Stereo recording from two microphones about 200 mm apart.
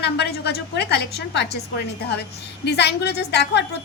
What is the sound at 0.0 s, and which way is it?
A woman's voice, 55° left (ahead or behind).